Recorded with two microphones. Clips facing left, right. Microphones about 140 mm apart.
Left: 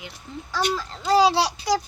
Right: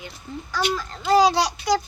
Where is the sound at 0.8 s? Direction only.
30° left (ahead or behind).